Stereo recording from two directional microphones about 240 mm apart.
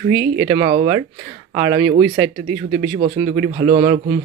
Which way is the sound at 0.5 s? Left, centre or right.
Centre.